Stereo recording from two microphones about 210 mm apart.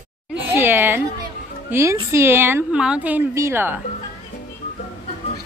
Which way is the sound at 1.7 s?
15° right (ahead or behind).